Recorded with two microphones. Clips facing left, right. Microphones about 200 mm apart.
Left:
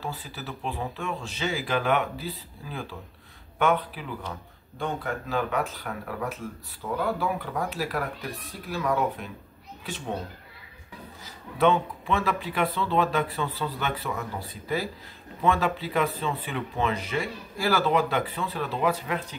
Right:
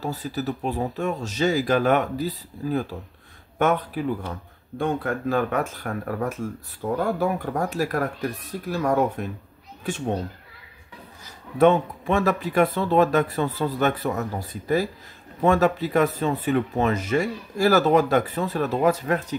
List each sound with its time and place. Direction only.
0.0 s speech: 40° right (ahead or behind)
11.2 s speech: 45° right (ahead or behind)